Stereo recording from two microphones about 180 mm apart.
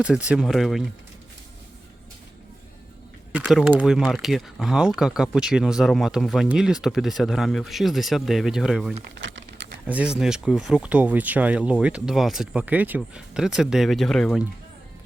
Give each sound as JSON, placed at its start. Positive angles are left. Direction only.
{"t": 0.3, "sound": "speech", "side_deg": 0}
{"t": 3.3, "sound": "speech", "side_deg": -5}
{"t": 9.1, "sound": "typing", "side_deg": -75}
{"t": 9.8, "sound": "speech", "side_deg": -5}